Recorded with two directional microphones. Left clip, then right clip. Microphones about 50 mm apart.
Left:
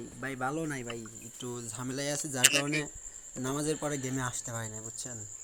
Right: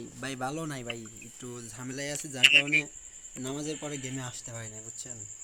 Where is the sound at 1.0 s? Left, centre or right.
Centre.